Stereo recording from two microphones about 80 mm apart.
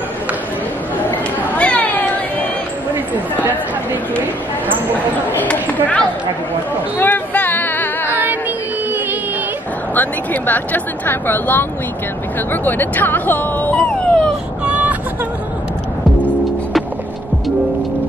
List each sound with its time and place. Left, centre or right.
1.1 s cat: centre
3.4 s chatter: right
5.3 s chatter: centre
7.0 s music: left
8.1 s music: right
9.9 s speech: left
13.7 s a sound: centre
14.6 s vehicle: centre